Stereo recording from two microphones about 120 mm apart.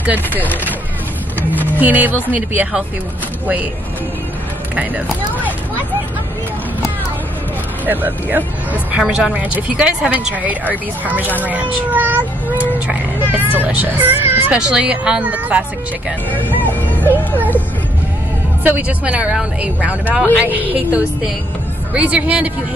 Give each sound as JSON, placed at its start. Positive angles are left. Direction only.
{"t": 0.0, "sound": "a woman's voice", "side_deg": -15}
{"t": 1.8, "sound": "a woman's voice", "side_deg": -15}
{"t": 4.7, "sound": "a woman's voice", "side_deg": -15}
{"t": 7.8, "sound": "a woman's voice", "side_deg": -15}
{"t": 11.9, "sound": "a sound", "side_deg": -15}
{"t": 13.3, "sound": "a woman's voice", "side_deg": -15}
{"t": 16.6, "sound": "speech", "side_deg": 15}
{"t": 18.6, "sound": "a woman's voice", "side_deg": -15}